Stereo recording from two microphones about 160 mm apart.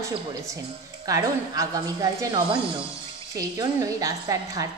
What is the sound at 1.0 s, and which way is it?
A woman's voice, 20° right (ahead or behind).